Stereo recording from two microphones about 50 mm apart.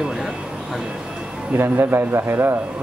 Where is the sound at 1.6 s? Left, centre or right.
Right.